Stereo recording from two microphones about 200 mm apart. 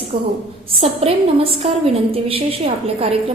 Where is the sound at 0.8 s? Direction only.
30° right (ahead or behind).